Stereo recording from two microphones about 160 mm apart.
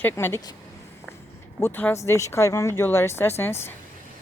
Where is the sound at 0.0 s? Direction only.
15° left (ahead or behind).